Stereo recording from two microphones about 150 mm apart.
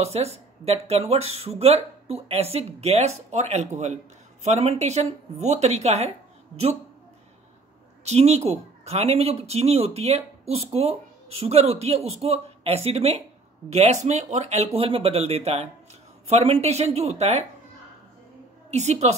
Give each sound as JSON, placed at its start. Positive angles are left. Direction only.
{"t": 0.0, "sound": "speech", "side_deg": -45}
{"t": 8.0, "sound": "speech", "side_deg": -45}
{"t": 18.7, "sound": "speech", "side_deg": -50}